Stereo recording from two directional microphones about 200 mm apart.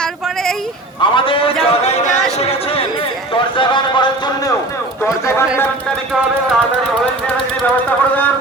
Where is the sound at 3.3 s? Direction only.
25° left (ahead or behind).